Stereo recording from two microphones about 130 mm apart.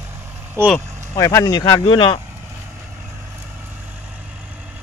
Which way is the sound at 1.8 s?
40° left (ahead or behind).